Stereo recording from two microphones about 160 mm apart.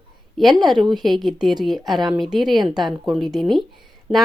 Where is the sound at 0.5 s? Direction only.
25° right (ahead or behind).